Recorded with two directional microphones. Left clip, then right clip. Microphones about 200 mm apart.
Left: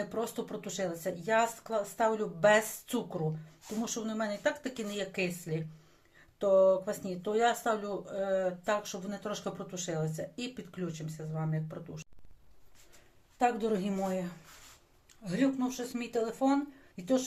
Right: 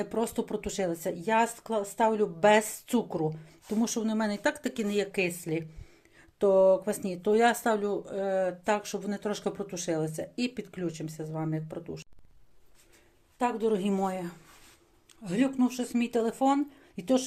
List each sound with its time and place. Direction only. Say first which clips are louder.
0.0 s speech: right 4 dB; 40° right (ahead or behind)
13.4 s a woman's voice: right 2 dB; 10° right (ahead or behind)
14.0 s speech: right 3 dB; 45° right (ahead or behind)